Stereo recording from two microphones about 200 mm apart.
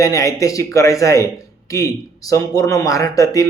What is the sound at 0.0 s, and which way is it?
Speech, 15° left (ahead or behind).